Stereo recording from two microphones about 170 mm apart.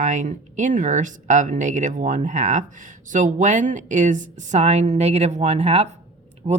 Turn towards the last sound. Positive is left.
turn(degrees=-35)  # may be behind; listen again after turning